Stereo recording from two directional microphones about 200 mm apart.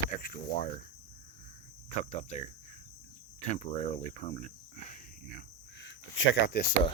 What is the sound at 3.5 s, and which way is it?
Speech, 35° left (ahead or behind).